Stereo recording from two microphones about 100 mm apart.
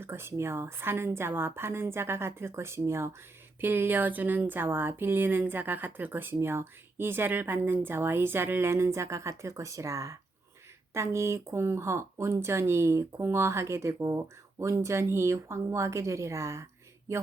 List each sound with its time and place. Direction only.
0.0 s a woman's voice: 25° right (ahead or behind)